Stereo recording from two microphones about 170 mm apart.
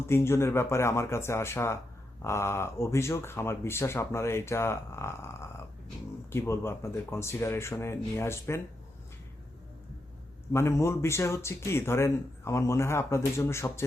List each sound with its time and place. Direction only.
0.1 s speech: 15° left (ahead or behind)
10.5 s speech: 15° left (ahead or behind)